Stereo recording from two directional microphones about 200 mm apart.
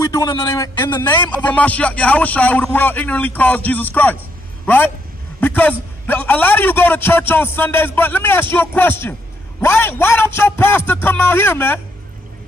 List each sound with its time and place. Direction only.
0.0 s a man's voice: 15° left (ahead or behind)
1.0 s a man's voice: 10° left (ahead or behind)